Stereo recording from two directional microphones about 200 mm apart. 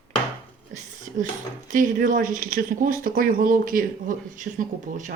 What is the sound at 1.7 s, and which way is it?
Speech, 40° right (ahead or behind).